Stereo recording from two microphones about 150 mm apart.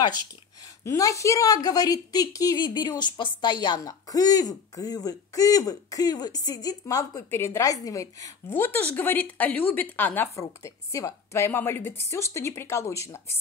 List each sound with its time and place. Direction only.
0.8 s speech: 20° left (ahead or behind)